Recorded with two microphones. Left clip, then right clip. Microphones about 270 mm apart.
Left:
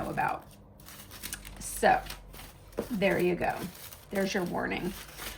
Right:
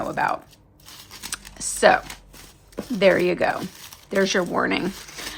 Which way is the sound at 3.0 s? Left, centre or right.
Centre.